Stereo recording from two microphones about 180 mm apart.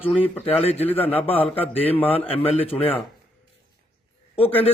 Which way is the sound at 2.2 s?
35° left (ahead or behind).